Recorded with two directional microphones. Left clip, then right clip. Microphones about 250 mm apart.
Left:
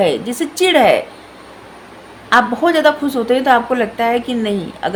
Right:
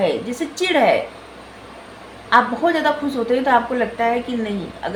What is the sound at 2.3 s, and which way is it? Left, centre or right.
A woman's voice, left.